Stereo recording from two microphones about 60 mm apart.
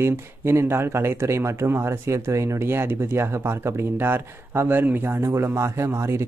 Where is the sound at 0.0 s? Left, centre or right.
Right.